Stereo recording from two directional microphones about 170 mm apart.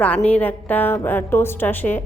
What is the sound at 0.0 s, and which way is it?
A woman's voice, 10° left (ahead or behind).